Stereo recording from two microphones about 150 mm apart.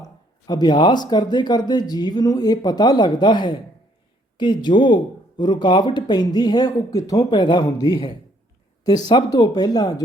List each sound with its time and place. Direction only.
0.0 s speech: 25° left (ahead or behind)